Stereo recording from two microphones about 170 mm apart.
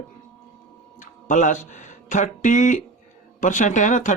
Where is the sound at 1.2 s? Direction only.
45° left (ahead or behind).